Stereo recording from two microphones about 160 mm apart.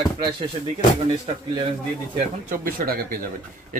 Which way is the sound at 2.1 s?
60° right (ahead or behind).